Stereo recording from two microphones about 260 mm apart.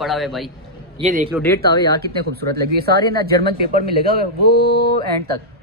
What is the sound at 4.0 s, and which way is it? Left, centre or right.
Speech, right.